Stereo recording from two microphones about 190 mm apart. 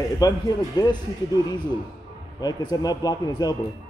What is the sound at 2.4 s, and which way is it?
Speech, 20° left (ahead or behind).